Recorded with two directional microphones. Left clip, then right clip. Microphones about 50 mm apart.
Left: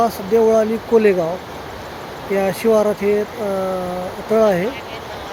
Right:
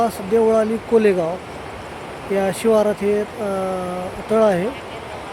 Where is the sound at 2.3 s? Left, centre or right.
Centre.